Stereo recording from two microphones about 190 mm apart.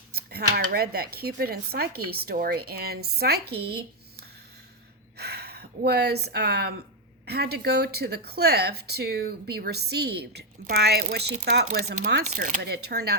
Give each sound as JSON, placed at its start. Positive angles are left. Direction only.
{"t": 0.1, "sound": "speech", "side_deg": -55}